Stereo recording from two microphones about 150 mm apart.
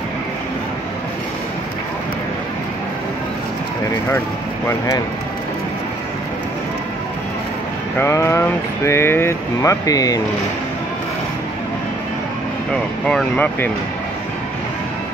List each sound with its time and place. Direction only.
4.6 s speech: 20° left (ahead or behind)
8.0 s speech: 20° left (ahead or behind)
13.0 s speech: 5° left (ahead or behind)